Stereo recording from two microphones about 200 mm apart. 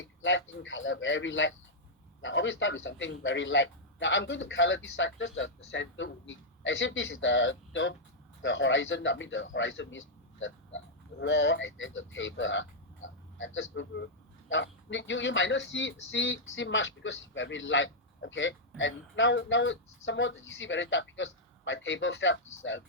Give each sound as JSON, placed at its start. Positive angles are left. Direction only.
{"t": 0.2, "sound": "a man's voice", "side_deg": 70}